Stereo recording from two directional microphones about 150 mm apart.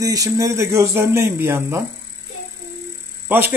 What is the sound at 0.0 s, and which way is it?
Speech, 25° right (ahead or behind).